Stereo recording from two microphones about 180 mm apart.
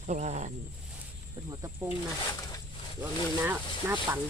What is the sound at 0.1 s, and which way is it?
Speech, 40° right (ahead or behind).